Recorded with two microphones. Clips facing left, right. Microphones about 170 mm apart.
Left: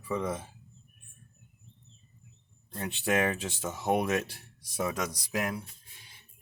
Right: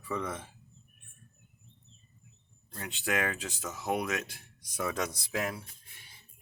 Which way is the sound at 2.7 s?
25° left (ahead or behind).